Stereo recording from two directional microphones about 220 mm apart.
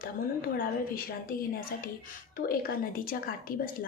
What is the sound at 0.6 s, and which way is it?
A woman's voice, 40° left (ahead or behind).